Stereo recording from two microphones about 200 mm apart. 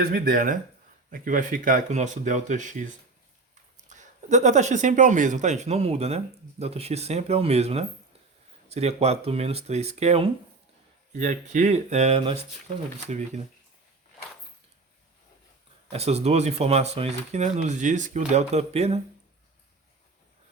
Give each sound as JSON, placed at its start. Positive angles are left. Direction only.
{"t": 0.0, "sound": "speech", "side_deg": -45}
{"t": 15.9, "sound": "speech", "side_deg": -30}